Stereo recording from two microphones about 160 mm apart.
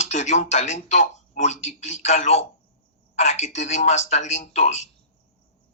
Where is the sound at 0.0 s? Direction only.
45° left (ahead or behind).